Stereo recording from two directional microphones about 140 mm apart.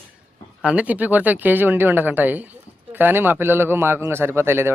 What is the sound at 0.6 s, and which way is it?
Speech, 10° right (ahead or behind).